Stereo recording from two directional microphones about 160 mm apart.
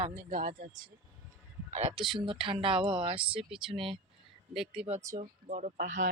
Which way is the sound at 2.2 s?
35° right (ahead or behind).